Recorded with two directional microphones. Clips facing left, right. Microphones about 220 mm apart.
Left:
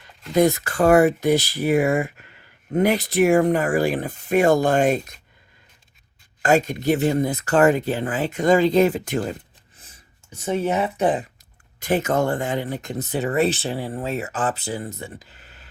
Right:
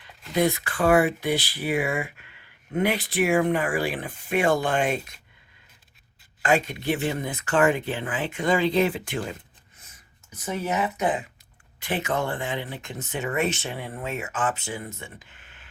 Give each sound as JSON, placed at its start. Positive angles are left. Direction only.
{"t": 0.0, "sound": "speech", "side_deg": 45}
{"t": 6.4, "sound": "speech", "side_deg": 40}
{"t": 9.7, "sound": "speech", "side_deg": 30}